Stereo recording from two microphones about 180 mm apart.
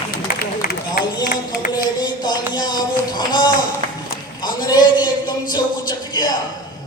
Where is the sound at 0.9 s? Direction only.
55° left (ahead or behind).